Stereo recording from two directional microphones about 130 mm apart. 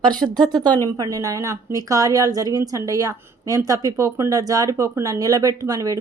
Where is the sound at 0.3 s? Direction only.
35° right (ahead or behind).